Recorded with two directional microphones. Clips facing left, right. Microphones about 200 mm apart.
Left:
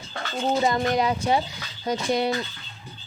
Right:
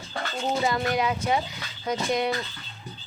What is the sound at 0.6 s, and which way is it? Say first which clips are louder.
Speech: left 2 dB; 35° left (ahead or behind).